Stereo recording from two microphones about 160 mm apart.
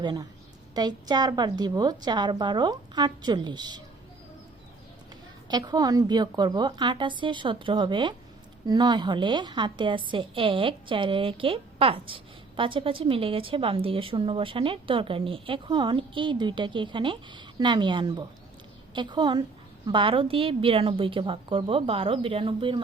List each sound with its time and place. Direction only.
0.0 s a woman's voice: 25° right (ahead or behind)
5.5 s a woman's voice: 25° right (ahead or behind)